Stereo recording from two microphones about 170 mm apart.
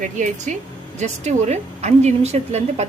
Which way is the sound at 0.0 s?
45° right (ahead or behind).